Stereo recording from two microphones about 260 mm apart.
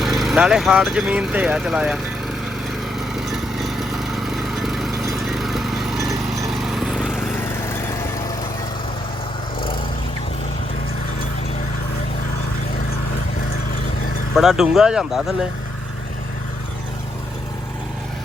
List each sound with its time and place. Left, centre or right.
0.0 s speech: centre
3.2 s lawn mower: centre
7.6 s vehicle: centre
14.3 s speech: centre